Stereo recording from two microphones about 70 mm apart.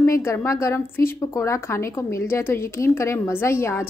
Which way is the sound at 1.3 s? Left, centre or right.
Left.